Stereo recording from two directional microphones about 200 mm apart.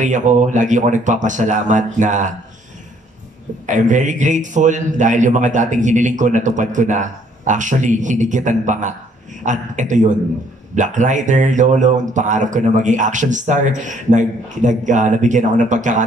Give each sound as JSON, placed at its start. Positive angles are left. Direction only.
{"t": 0.0, "sound": "a man's voice", "side_deg": -40}
{"t": 3.6, "sound": "a man's voice", "side_deg": -40}